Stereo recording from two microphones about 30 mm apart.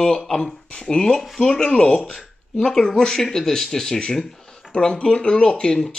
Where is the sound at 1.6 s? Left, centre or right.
Left.